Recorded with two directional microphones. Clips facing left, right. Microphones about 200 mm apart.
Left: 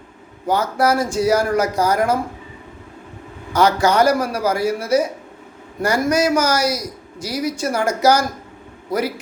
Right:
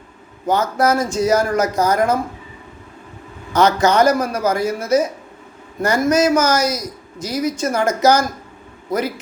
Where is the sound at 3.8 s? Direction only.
20° right (ahead or behind).